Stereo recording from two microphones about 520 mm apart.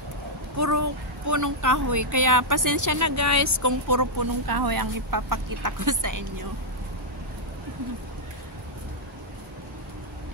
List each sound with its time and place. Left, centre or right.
0.6 s speech: right